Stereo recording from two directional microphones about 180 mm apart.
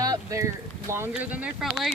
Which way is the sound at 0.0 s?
20° right (ahead or behind).